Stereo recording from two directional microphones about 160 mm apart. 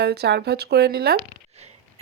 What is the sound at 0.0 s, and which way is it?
Speech, 90° right.